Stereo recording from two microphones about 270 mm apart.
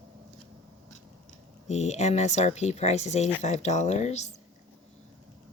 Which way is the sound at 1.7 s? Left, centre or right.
Left.